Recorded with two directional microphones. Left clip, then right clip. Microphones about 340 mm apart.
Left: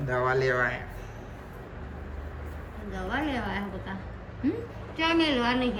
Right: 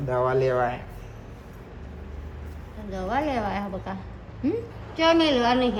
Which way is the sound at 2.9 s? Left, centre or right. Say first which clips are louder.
Right 5 dB; right.